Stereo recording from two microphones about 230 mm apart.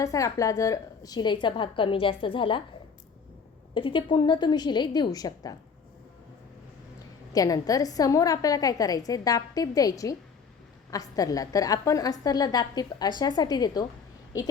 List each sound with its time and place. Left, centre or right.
0.0 s a woman's voice: centre
3.8 s a woman's voice: left
7.3 s a woman's voice: centre